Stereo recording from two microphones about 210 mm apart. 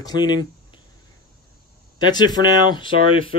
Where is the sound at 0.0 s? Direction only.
20° left (ahead or behind).